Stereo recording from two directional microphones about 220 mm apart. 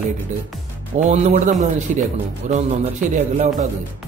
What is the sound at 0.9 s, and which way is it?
A man's voice, 30° right (ahead or behind).